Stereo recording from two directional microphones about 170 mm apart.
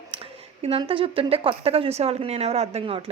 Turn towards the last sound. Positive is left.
turn(degrees=-35)  # may be behind; listen again after turning